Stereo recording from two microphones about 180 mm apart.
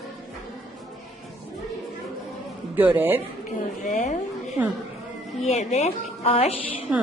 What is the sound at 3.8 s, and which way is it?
Speech, 40° left (ahead or behind).